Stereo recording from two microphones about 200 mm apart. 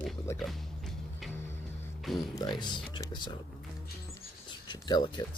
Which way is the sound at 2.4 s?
20° left (ahead or behind).